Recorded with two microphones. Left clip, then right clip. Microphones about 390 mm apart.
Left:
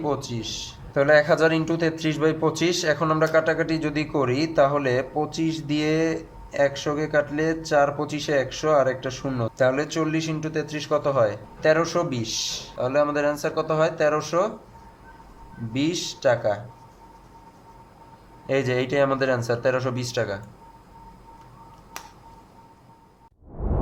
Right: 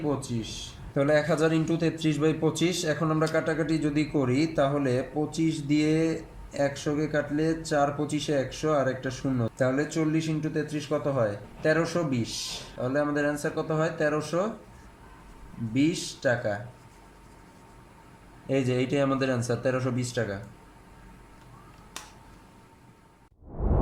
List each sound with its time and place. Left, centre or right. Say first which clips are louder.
0.9 s speech: left 6 dB; left
15.7 s speech: left 1 dB; left
18.4 s speech: left 4 dB; left